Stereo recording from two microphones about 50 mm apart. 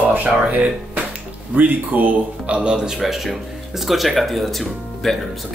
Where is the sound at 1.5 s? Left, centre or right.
Right.